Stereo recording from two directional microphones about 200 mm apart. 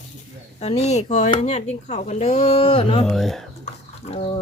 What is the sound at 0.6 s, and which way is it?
Speech, 30° left (ahead or behind).